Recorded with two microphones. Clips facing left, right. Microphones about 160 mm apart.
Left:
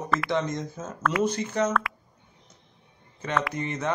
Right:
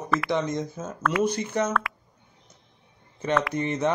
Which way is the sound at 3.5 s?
20° right (ahead or behind).